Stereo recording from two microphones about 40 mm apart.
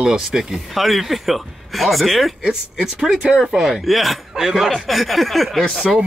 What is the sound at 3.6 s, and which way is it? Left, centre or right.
Speech, centre.